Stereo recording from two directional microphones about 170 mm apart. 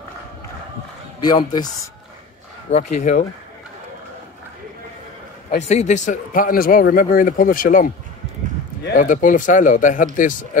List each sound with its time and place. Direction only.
1.2 s a man's voice: 25° left (ahead or behind)
2.7 s speech: 45° left (ahead or behind)
5.6 s speech: 40° left (ahead or behind)
8.9 s speech: 50° left (ahead or behind)